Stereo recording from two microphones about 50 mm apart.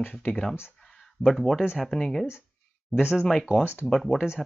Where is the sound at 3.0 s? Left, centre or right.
Centre.